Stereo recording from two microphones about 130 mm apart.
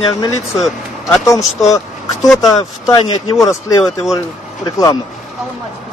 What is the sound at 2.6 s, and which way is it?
Speech, 30° left (ahead or behind).